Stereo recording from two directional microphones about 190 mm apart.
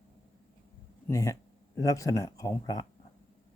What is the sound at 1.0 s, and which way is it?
Speech, 15° left (ahead or behind).